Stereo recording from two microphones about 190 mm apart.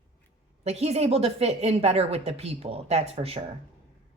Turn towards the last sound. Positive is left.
turn(degrees=-30)  # may be behind; listen again after turning